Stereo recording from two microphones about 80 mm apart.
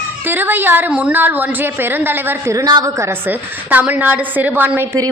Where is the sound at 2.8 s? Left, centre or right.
Right.